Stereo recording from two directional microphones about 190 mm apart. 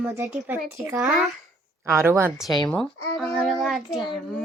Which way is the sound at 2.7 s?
Centre (ahead or behind).